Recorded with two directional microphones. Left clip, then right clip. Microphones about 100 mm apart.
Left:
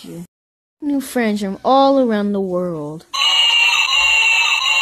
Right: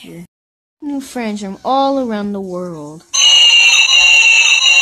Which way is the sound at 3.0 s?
30° left (ahead or behind).